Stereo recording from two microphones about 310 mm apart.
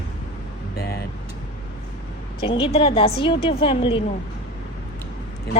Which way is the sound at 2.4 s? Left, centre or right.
Centre.